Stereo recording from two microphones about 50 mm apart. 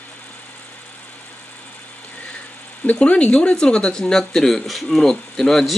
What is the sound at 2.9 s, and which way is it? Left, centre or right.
Speech, left.